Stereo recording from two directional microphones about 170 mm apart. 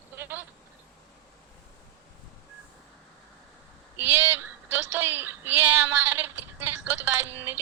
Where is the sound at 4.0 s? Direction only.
15° right (ahead or behind).